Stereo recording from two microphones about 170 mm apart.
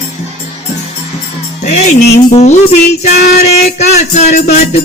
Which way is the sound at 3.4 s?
40° left (ahead or behind).